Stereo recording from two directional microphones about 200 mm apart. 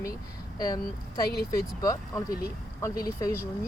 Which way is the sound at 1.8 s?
15° left (ahead or behind).